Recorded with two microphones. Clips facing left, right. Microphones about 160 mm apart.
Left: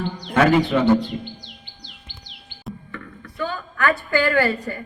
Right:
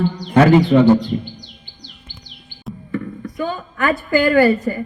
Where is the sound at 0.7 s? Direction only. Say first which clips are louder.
Right 7 dB; 35° right (ahead or behind).